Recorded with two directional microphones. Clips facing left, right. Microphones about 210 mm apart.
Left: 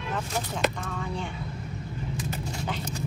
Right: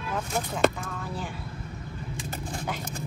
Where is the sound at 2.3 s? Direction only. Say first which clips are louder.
Left 2 dB; 50° right (ahead or behind).